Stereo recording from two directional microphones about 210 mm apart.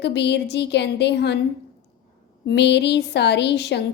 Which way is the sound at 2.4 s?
55° left (ahead or behind).